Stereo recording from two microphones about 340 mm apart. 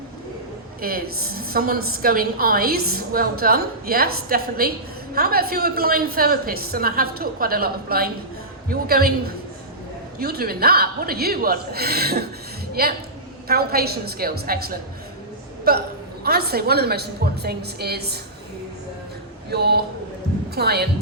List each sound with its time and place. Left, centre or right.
0.8 s a woman's voice: right
19.5 s a woman's voice: right